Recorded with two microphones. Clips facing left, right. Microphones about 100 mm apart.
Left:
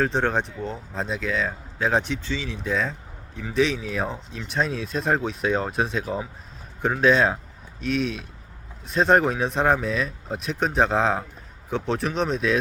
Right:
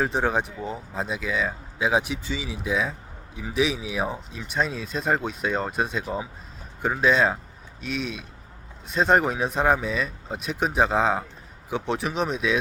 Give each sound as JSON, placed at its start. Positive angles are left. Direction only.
{"t": 0.0, "sound": "speech", "side_deg": -5}